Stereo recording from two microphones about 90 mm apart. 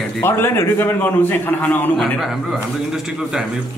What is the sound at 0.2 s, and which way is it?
A man's voice, 25° left (ahead or behind).